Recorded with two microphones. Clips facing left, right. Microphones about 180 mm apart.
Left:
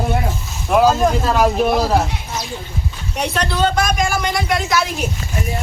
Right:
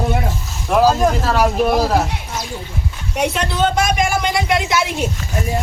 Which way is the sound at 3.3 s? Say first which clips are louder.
Left 3 dB; 20° right (ahead or behind).